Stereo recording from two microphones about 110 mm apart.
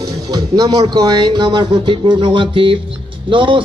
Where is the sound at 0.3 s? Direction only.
35° right (ahead or behind).